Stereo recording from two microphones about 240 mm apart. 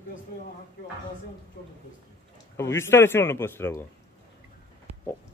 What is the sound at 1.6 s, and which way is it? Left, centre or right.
Speech, left.